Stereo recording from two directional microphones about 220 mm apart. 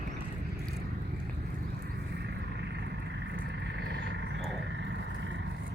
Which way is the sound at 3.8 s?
50° right (ahead or behind).